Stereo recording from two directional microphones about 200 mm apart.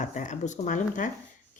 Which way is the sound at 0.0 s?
40° left (ahead or behind).